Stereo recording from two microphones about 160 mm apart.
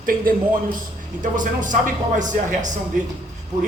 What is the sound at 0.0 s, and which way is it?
A man's voice, 60° right (ahead or behind).